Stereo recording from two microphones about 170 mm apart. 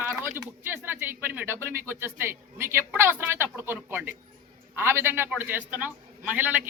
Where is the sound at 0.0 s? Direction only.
10° right (ahead or behind).